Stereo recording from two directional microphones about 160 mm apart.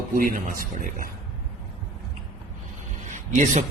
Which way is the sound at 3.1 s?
50° right (ahead or behind).